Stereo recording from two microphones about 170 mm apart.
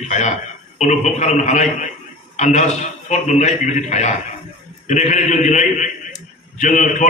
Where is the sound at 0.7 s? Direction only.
45° left (ahead or behind).